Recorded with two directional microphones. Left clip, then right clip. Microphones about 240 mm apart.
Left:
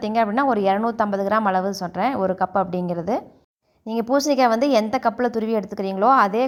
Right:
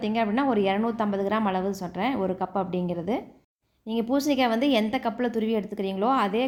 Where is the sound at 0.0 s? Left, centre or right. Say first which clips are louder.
Left 6 dB; left.